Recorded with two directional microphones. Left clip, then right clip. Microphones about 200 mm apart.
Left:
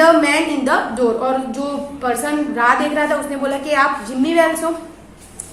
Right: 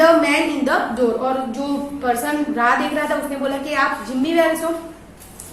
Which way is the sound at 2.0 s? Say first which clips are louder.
Left 1 dB; 20° left (ahead or behind).